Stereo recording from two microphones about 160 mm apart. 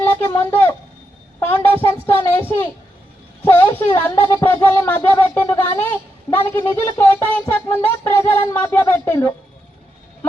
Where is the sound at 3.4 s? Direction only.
15° left (ahead or behind).